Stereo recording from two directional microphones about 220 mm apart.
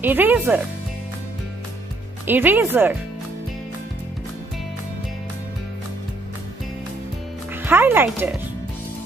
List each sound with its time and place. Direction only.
0.0 s speech: 10° right (ahead or behind)
2.2 s speech: 10° right (ahead or behind)
7.5 s speech: 10° right (ahead or behind)